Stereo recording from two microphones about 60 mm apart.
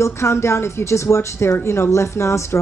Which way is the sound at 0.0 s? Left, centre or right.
Left.